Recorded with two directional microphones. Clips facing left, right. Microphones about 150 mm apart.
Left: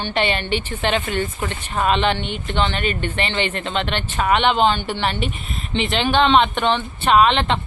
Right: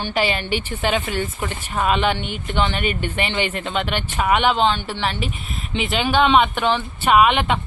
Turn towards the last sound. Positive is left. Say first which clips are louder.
# even
turn(degrees=-10)  # may be behind; listen again after turning